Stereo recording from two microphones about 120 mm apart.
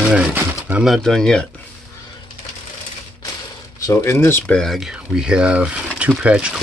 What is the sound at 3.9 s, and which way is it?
Speech, 20° left (ahead or behind).